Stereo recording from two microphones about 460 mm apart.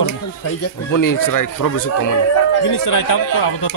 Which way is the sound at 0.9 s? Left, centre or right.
Left.